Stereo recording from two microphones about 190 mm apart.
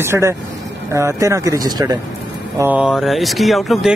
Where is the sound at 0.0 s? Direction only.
15° right (ahead or behind).